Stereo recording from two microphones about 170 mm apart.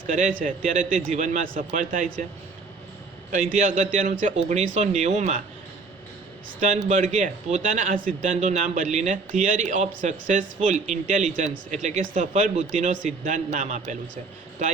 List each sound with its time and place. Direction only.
0.1 s a man's voice: 50° right (ahead or behind)
3.3 s a man's voice: 45° right (ahead or behind)
6.8 s a man's voice: 45° right (ahead or behind)